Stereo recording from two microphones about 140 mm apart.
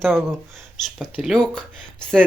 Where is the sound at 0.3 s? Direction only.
Centre (ahead or behind).